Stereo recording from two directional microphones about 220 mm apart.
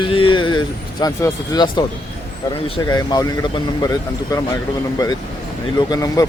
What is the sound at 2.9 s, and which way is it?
Speech, 15° left (ahead or behind).